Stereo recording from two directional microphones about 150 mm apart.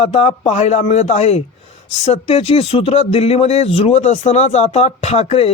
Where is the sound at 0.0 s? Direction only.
45° left (ahead or behind).